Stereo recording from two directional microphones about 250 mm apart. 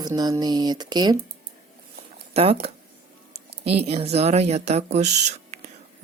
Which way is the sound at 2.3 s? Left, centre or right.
Right.